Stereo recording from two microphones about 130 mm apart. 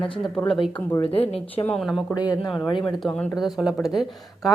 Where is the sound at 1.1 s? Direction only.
50° left (ahead or behind).